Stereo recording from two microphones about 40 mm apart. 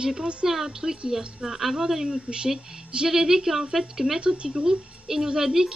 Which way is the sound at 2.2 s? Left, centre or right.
Centre.